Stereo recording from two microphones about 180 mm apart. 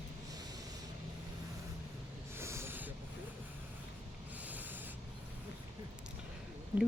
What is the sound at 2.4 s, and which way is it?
Snort, 15° right (ahead or behind).